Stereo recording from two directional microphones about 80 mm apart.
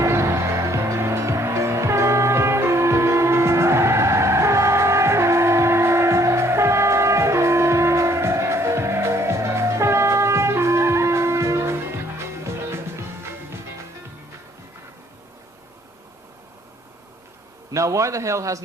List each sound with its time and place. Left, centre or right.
0.0 s music: right
17.7 s a man's voice: right